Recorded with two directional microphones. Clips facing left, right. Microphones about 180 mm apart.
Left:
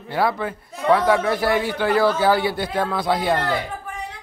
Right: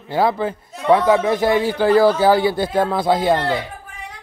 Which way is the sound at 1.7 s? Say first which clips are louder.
Right 5 dB; 35° right (ahead or behind).